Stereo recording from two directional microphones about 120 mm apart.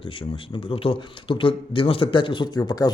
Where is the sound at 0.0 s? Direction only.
50° left (ahead or behind).